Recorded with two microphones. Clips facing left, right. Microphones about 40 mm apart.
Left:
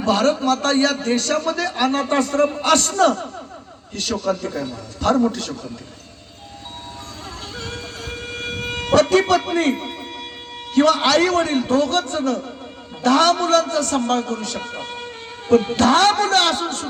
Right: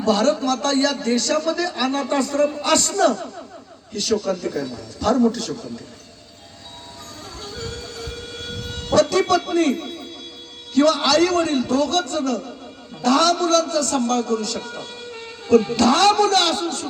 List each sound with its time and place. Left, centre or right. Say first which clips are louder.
0.0 s a man's voice: left 1 dB; left
7.5 s music: even; left
10.8 s a man's voice: left 1 dB; left